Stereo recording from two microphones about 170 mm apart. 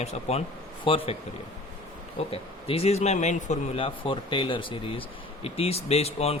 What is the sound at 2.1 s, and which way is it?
Speech, 35° left (ahead or behind).